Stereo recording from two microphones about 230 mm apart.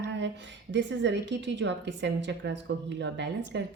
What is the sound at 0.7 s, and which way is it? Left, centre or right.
Speech, right.